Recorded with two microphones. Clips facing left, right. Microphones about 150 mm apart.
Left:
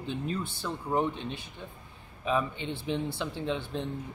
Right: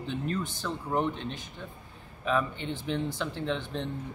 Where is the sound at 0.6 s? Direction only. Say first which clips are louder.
Left 2 dB; 10° left (ahead or behind).